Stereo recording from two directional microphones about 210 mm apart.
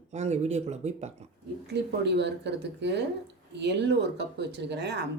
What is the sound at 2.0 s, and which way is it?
Speech, 55° right (ahead or behind).